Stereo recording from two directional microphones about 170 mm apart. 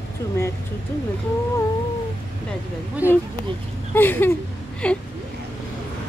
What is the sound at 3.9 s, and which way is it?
Speech, 10° left (ahead or behind).